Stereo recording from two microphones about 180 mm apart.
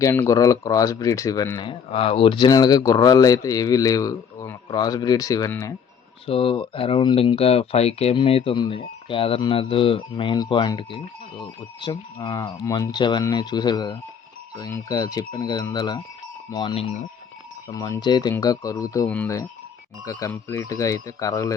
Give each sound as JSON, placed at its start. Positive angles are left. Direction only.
{"t": 0.0, "sound": "speech", "side_deg": 15}
{"t": 6.2, "sound": "speech", "side_deg": 30}
{"t": 17.7, "sound": "speech", "side_deg": 20}
{"t": 19.0, "sound": "speech", "side_deg": 10}